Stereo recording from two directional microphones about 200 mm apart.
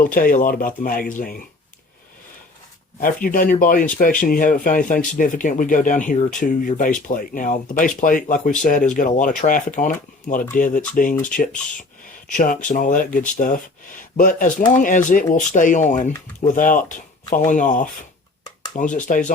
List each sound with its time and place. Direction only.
0.0 s speech: 45° left (ahead or behind)
3.0 s speech: 45° left (ahead or behind)
11.1 s speech: 5° left (ahead or behind)
12.3 s speech: 40° left (ahead or behind)
19.0 s speech: 40° left (ahead or behind)